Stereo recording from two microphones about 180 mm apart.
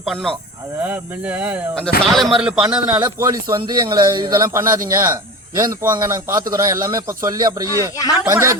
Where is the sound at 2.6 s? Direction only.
15° right (ahead or behind).